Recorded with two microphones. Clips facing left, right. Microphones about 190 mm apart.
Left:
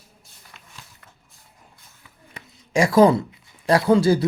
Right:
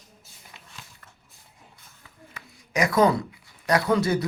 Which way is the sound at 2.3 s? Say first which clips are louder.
Left 7 dB; 30° left (ahead or behind).